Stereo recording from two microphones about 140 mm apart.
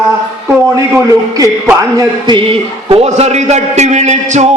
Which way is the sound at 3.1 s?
50° right (ahead or behind).